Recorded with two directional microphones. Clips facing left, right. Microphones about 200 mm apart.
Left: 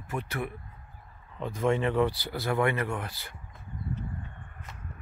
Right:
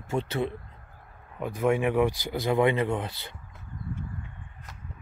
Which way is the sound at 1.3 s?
10° right (ahead or behind).